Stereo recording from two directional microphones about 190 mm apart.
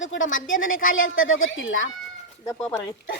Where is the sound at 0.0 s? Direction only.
90° left.